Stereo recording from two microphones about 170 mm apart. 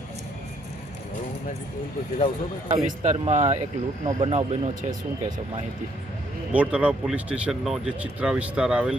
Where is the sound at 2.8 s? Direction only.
45° right (ahead or behind).